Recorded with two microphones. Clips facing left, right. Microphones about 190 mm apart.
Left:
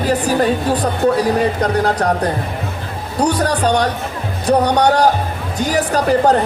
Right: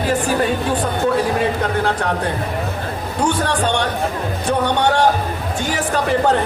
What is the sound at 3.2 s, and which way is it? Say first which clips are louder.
Speech: left 3 dB; 40° left (ahead or behind).